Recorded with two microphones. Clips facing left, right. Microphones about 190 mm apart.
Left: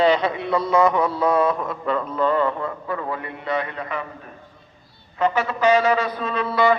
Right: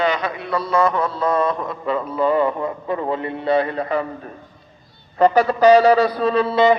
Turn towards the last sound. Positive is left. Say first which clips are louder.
# right 4 dB
turn(degrees=-20)  # may be behind; listen again after turning